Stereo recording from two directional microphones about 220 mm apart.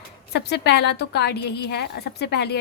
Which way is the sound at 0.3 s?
50° left (ahead or behind).